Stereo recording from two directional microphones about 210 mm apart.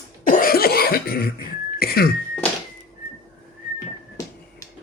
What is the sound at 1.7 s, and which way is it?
Throat clearing, 45° left (ahead or behind).